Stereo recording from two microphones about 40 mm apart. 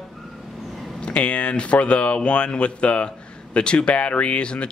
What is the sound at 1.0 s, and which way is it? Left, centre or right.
Speech, left.